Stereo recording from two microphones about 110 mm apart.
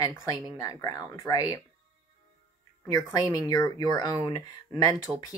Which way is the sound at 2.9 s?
30° left (ahead or behind).